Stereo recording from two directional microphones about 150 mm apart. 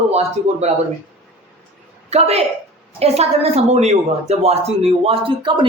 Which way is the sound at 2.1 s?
45° right (ahead or behind).